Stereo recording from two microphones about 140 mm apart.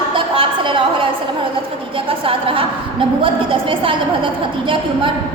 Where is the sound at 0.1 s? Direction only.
35° right (ahead or behind).